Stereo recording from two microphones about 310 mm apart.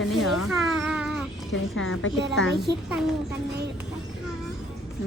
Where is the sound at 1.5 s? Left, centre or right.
Left.